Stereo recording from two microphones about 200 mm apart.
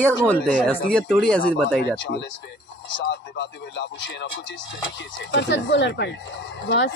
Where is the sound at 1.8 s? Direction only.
60° left (ahead or behind).